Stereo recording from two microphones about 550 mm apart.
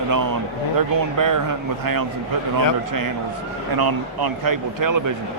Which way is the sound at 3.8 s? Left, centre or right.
Right.